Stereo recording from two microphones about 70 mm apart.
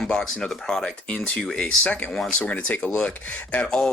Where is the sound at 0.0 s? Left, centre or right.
Centre.